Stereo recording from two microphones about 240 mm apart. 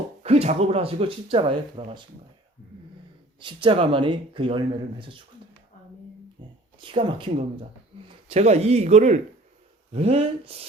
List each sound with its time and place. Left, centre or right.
0.2 s speech: right
3.4 s speech: right
6.8 s a man's voice: right